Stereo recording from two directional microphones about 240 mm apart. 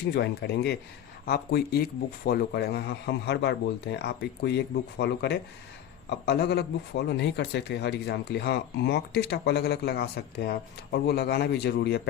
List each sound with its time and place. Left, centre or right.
0.1 s a man's voice: left